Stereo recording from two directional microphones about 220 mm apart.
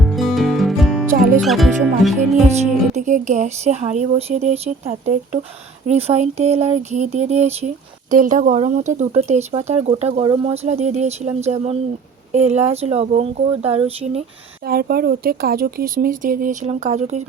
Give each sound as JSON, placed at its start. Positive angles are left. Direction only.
{"t": 0.0, "sound": "music", "side_deg": 0}
{"t": 1.4, "sound": "speech", "side_deg": 0}
{"t": 2.6, "sound": "speech", "side_deg": -35}
{"t": 6.1, "sound": "speech", "side_deg": -30}
{"t": 14.7, "sound": "speech", "side_deg": -45}